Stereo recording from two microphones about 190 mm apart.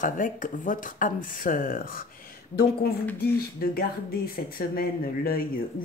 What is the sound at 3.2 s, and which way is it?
Speech, 55° left (ahead or behind).